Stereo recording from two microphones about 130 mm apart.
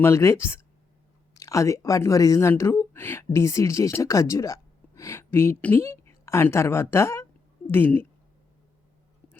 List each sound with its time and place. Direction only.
0.0 s speech: 20° left (ahead or behind)